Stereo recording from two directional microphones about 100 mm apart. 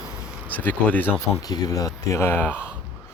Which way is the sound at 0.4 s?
15° left (ahead or behind).